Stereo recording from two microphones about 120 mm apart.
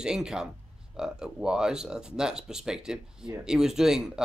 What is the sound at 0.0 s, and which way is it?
Speech, 5° right (ahead or behind).